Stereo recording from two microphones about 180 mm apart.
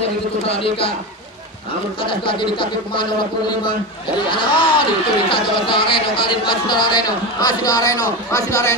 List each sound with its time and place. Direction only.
0.0 s a man's voice: 30° left (ahead or behind)
2.0 s a man's voice: 30° left (ahead or behind)